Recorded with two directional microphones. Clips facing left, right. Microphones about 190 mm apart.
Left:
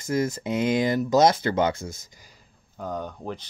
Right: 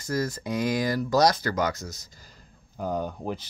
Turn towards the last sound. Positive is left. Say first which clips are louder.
# right 2 dB
turn(degrees=-10)  # may be behind; listen again after turning